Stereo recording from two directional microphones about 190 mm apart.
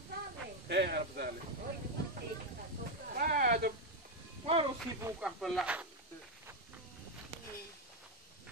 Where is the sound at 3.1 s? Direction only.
45° right (ahead or behind).